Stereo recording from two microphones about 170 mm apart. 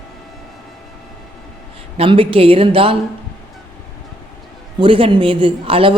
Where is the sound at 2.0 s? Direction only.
35° right (ahead or behind).